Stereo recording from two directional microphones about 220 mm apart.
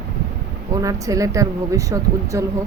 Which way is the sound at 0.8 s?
15° right (ahead or behind).